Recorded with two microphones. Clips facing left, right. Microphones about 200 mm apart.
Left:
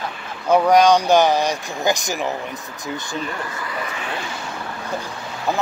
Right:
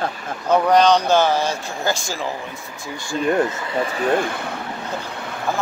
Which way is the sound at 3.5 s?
25° right (ahead or behind).